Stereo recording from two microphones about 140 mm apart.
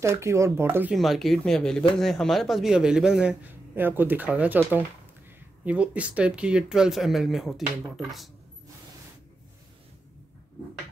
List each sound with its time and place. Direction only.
0.0 s speech: 20° right (ahead or behind)
0.9 s speech: centre (ahead or behind)